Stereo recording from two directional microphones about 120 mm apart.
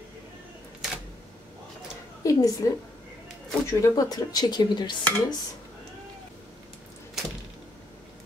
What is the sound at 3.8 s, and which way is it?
Speech, 30° left (ahead or behind).